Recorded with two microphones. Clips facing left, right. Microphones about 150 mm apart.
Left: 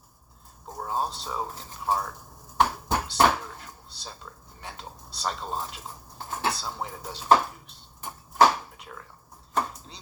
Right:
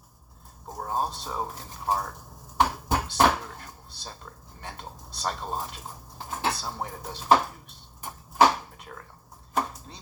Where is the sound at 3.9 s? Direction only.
50° right (ahead or behind).